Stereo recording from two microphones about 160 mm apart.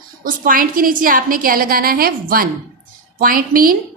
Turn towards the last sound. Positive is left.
turn(degrees=-65)  # may be behind; listen again after turning